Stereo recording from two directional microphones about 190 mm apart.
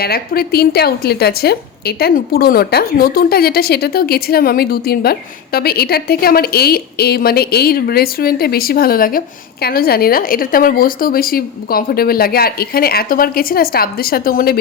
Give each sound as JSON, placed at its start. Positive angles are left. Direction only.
{"t": 0.0, "sound": "a woman's voice", "side_deg": 55}